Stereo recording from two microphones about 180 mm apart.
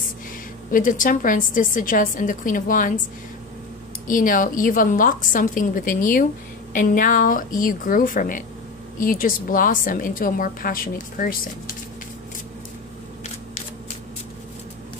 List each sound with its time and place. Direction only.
0.7 s a woman's voice: 50° left (ahead or behind)
4.1 s a woman's voice: 50° left (ahead or behind)